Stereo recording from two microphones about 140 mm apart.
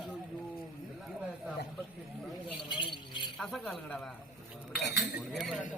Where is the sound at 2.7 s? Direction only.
35° left (ahead or behind).